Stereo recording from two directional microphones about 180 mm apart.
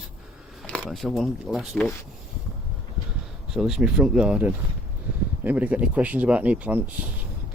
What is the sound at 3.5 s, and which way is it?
Speech, centre (ahead or behind).